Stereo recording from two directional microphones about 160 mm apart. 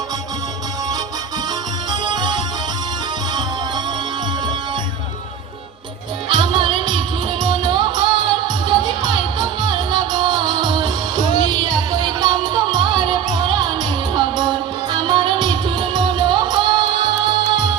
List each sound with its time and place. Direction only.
1.9 s music: 25° right (ahead or behind)
6.2 s music: 30° right (ahead or behind)